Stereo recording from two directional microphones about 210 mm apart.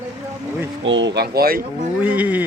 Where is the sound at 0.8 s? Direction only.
60° right (ahead or behind).